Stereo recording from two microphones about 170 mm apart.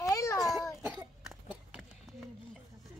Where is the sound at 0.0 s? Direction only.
20° left (ahead or behind).